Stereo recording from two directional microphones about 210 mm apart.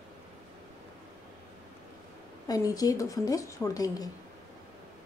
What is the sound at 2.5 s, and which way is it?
Speech, 15° left (ahead or behind).